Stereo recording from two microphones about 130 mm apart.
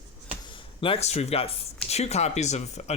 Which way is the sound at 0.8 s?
45° left (ahead or behind).